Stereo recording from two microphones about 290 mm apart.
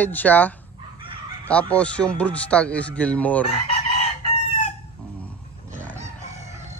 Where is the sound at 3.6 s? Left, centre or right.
Left.